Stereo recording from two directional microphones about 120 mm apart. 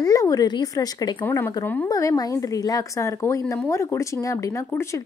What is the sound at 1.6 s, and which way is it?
Speech, 15° left (ahead or behind).